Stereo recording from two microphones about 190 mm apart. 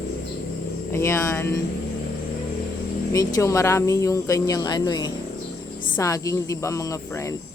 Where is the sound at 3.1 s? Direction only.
15° left (ahead or behind).